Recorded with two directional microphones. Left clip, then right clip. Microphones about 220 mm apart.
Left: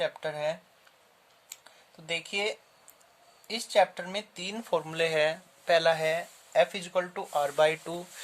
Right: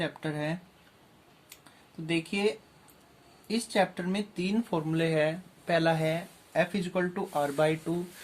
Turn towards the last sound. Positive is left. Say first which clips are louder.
# left 2 dB
turn(degrees=50)  # may be behind; listen again after turning